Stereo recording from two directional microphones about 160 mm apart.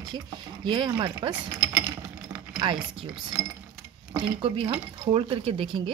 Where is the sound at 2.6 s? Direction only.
30° right (ahead or behind).